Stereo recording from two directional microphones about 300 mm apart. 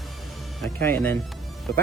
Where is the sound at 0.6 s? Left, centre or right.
Centre.